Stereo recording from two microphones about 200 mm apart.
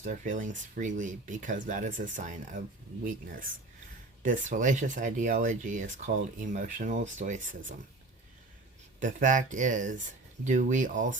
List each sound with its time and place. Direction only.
0.0 s speech: 40° right (ahead or behind)
4.2 s speech: 40° right (ahead or behind)
9.0 s speech: 40° right (ahead or behind)